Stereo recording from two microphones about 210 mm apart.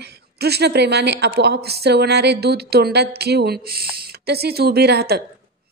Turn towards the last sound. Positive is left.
turn(degrees=-50)  # may be behind; listen again after turning